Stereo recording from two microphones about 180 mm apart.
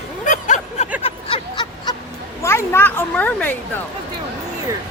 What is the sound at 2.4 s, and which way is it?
A child's voice, 15° left (ahead or behind).